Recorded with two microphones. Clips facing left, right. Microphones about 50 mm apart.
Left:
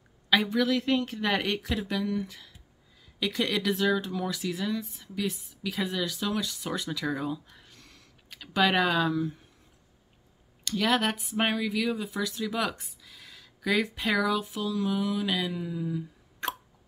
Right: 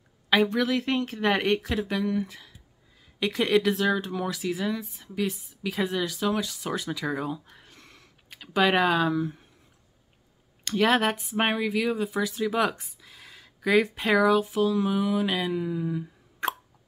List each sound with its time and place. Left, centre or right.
0.5 s speech: centre
10.6 s speech: right
11.0 s speech: centre
13.0 s a sound: centre
13.8 s speech: centre
14.7 s a sound: centre